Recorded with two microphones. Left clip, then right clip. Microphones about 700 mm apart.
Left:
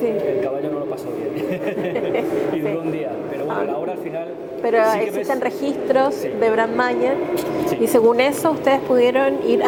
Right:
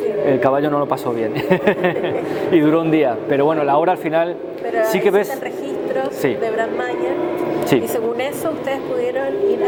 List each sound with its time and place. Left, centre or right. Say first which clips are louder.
6.0 s a woman's voice: right 1 dB; left
7.9 s a woman's voice: left 6 dB; left